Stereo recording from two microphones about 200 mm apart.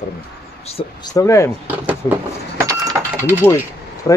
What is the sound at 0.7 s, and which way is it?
Speech, 20° left (ahead or behind).